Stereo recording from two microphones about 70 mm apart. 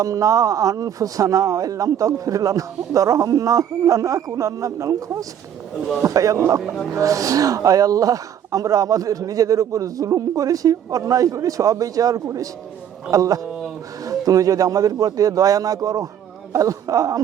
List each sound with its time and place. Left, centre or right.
0.0 s speech: right